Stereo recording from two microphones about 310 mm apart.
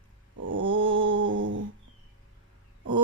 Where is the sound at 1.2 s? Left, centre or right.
Right.